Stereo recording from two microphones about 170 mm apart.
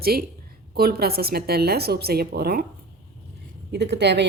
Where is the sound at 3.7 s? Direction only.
80° right.